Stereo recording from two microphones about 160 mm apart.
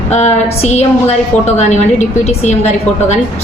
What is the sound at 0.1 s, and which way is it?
A woman's voice, 45° left (ahead or behind).